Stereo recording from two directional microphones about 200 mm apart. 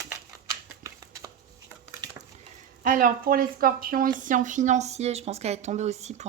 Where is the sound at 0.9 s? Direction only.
15° right (ahead or behind).